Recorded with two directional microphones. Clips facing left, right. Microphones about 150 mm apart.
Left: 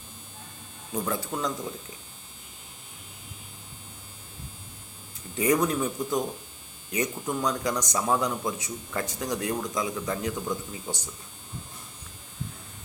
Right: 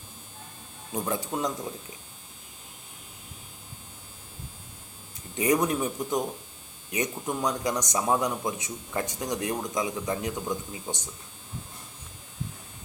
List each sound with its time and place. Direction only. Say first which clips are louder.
0.9 s a man's voice: even; 20° right (ahead or behind)
5.4 s a man's voice: even; 20° right (ahead or behind)